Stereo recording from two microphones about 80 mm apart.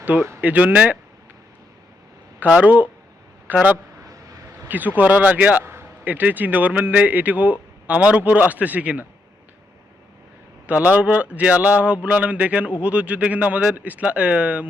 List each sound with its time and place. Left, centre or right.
0.0 s speech: centre
2.4 s a man's voice: centre
10.7 s speech: centre